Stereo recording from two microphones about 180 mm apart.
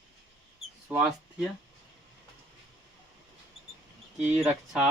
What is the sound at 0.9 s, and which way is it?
Speech, 5° right (ahead or behind).